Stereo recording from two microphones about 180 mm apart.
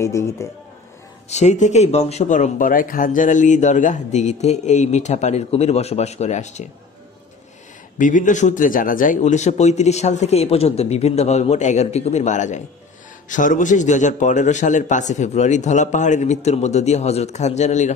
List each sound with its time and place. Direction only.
0.0 s speech: 15° left (ahead or behind)
1.3 s speech: 40° left (ahead or behind)
8.0 s speech: 45° left (ahead or behind)